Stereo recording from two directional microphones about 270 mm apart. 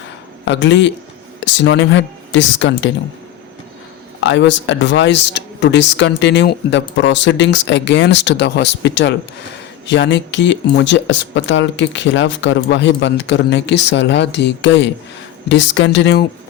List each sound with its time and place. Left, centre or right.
0.4 s a woman's voice: left
4.2 s speech: left